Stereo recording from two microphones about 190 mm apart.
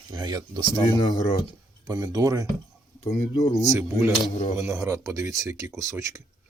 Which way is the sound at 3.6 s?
15° right (ahead or behind).